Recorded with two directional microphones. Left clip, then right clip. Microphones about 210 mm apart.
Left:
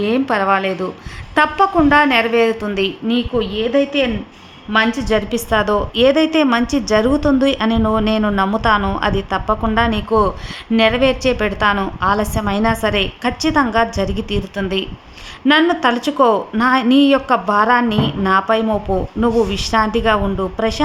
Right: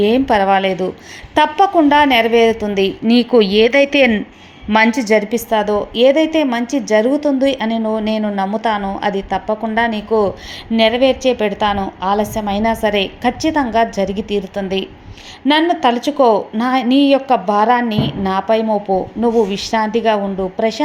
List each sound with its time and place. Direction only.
0.0 s a woman's voice: 10° right (ahead or behind)
3.2 s speech: 10° left (ahead or behind)
3.6 s a woman's voice: 25° right (ahead or behind); by 5.4 s 5° right (ahead or behind)
5.5 s a woman's voice: 5° left (ahead or behind)